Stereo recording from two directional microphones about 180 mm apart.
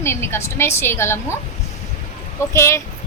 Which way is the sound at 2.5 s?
15° left (ahead or behind).